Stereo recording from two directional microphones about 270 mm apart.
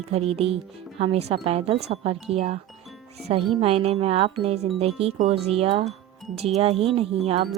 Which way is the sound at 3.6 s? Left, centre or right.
Right.